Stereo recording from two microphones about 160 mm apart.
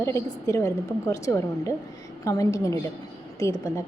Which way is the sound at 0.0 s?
15° left (ahead or behind).